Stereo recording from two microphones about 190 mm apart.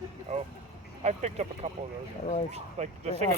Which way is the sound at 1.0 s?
35° right (ahead or behind).